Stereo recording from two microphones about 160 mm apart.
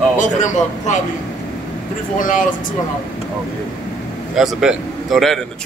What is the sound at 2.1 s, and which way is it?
Speech, 55° left (ahead or behind).